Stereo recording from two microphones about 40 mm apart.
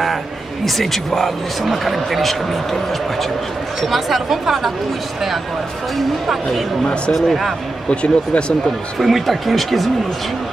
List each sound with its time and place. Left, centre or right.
0.7 s speech: centre
3.8 s speech: centre
5.9 s speech: centre
7.9 s speech: left
8.9 s speech: centre